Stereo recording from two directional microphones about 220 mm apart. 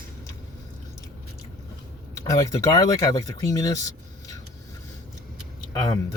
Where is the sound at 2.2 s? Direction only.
15° left (ahead or behind).